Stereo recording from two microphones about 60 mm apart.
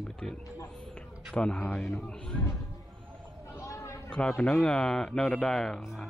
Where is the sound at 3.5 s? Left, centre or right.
Left.